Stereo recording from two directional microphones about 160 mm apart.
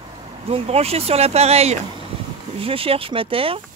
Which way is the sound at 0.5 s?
40° right (ahead or behind).